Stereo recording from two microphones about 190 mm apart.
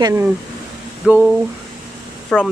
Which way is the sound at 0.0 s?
15° right (ahead or behind).